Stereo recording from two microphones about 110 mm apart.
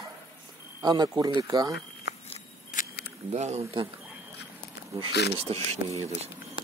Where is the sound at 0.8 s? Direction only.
40° right (ahead or behind).